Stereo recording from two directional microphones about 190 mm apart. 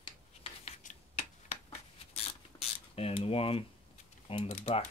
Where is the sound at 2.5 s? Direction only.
25° left (ahead or behind).